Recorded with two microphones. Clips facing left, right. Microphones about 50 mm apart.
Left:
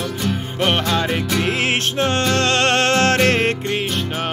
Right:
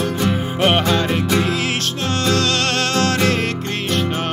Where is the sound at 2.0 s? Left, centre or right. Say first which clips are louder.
Even; left.